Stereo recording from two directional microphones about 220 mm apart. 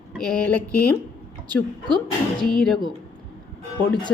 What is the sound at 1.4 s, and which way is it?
A woman's voice, 20° right (ahead or behind).